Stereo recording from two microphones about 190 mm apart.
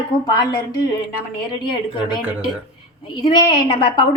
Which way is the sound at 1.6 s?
25° left (ahead or behind).